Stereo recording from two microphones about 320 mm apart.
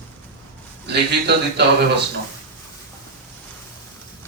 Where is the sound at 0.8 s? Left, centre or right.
Right.